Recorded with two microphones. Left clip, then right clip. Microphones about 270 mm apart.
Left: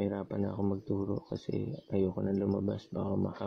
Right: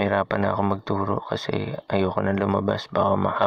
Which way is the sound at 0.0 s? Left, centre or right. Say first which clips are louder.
Right 13 dB; right.